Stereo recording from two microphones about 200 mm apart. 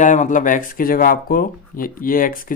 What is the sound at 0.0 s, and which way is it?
Speech, 40° left (ahead or behind).